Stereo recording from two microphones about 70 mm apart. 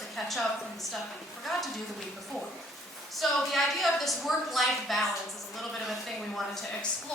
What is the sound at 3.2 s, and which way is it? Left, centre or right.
A woman's voice, centre.